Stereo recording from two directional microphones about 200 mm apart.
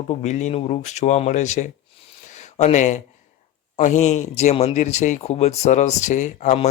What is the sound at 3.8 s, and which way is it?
Speech, 35° left (ahead or behind).